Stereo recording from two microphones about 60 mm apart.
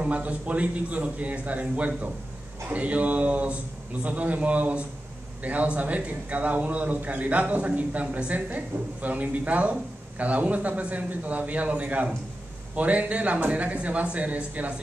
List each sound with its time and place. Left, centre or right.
0.0 s a man's voice: right